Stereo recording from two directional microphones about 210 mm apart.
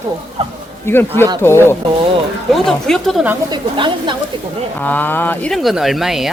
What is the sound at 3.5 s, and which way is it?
Speech, 20° right (ahead or behind).